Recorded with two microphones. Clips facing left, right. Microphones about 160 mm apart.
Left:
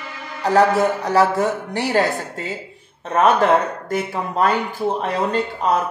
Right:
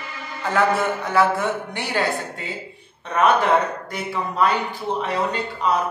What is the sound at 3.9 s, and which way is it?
Speech, 45° left (ahead or behind).